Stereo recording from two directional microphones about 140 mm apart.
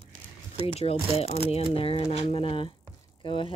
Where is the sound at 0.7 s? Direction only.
45° left (ahead or behind).